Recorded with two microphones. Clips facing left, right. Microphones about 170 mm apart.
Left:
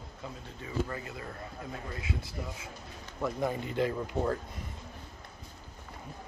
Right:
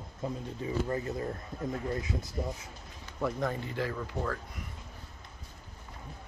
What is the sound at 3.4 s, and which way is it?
Speech, 15° left (ahead or behind).